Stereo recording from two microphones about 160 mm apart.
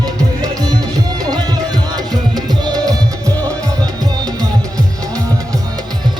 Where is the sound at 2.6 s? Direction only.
25° right (ahead or behind).